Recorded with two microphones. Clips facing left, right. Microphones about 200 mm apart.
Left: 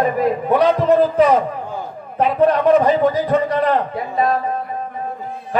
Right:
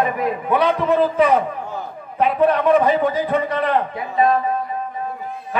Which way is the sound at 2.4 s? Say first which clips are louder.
Left 2 dB; 45° left (ahead or behind).